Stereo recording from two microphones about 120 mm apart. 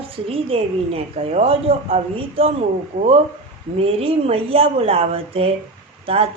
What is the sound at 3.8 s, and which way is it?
A woman's voice, 55° right (ahead or behind).